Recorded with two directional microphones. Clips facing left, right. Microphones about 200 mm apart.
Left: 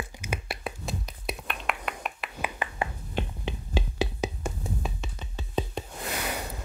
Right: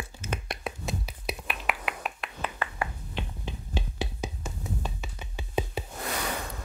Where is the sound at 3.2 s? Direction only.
45° left (ahead or behind).